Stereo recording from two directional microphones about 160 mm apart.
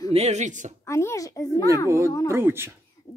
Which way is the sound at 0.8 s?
20° left (ahead or behind).